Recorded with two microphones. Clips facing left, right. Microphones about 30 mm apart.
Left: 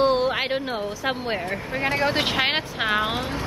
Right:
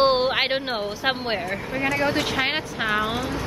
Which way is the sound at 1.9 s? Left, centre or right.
Centre.